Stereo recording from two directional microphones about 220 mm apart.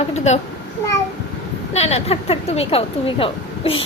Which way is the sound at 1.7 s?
30° left (ahead or behind).